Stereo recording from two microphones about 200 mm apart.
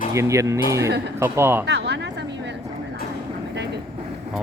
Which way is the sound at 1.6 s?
55° right (ahead or behind).